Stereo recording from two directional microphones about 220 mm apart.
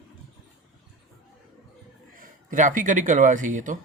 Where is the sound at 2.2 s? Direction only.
35° right (ahead or behind).